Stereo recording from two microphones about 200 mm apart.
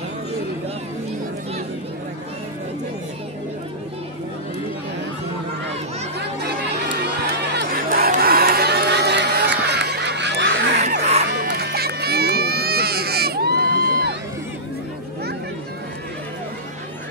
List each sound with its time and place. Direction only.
6.1 s music: 55° right (ahead or behind)
7.5 s crowd: 50° right (ahead or behind)
10.8 s music: 35° right (ahead or behind)
11.4 s music: 55° right (ahead or behind)